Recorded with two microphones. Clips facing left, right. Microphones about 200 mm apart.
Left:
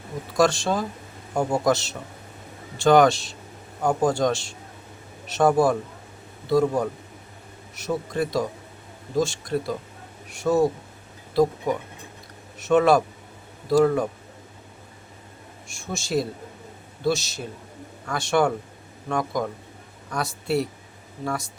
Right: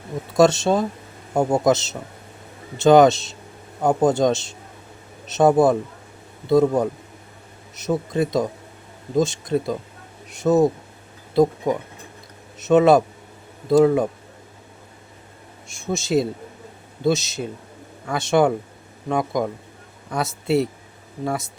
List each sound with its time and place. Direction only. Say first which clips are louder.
0.3 s speech: right 5 dB; 25° right (ahead or behind)
15.9 s speech: right 5 dB; 20° right (ahead or behind)